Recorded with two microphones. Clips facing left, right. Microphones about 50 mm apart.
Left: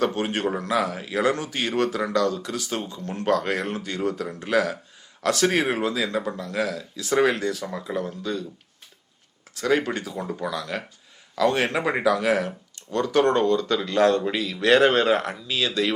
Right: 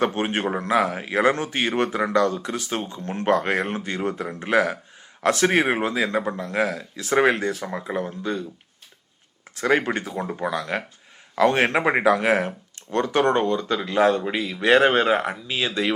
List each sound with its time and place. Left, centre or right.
0.0 s speech: right
9.6 s speech: right